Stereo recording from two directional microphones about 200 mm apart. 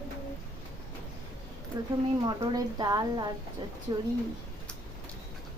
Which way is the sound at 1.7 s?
20° right (ahead or behind).